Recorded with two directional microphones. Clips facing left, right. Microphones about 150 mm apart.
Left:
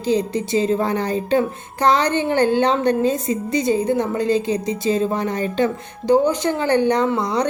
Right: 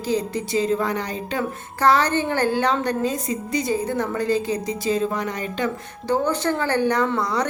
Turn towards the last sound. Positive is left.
turn(degrees=20)  # may be behind; listen again after turning